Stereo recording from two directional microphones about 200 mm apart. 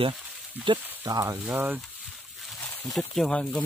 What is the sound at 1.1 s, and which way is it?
Speech, 15° right (ahead or behind).